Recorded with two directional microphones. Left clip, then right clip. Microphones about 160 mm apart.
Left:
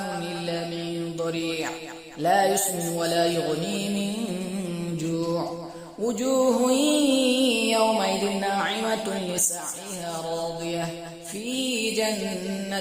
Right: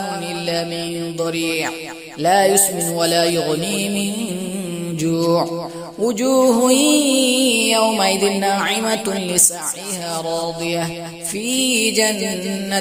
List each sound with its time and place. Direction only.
1.2 s music: 35° right (ahead or behind)